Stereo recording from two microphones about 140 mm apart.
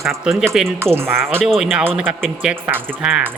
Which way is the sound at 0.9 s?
15° right (ahead or behind).